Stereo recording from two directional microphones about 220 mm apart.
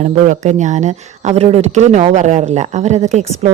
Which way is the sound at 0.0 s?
35° right (ahead or behind).